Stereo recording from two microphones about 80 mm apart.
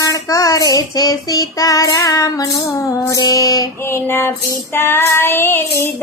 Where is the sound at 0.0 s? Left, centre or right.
Left.